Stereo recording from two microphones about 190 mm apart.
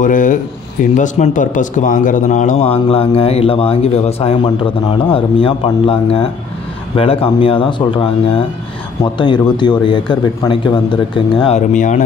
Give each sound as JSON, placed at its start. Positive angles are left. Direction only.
{"t": 0.0, "sound": "a man's voice", "side_deg": 45}
{"t": 11.4, "sound": "speech", "side_deg": 40}